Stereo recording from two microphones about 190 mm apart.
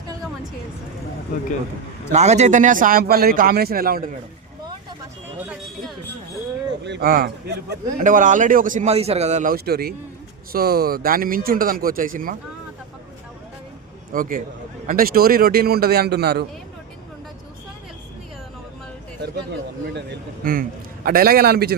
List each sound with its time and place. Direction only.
2.1 s a man's voice: 35° right (ahead or behind)
6.8 s a man's voice: 60° right (ahead or behind)
14.1 s a man's voice: 45° right (ahead or behind)
19.9 s a man's voice: 60° right (ahead or behind)